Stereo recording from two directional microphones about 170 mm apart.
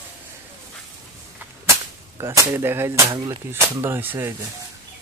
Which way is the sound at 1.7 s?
20° right (ahead or behind).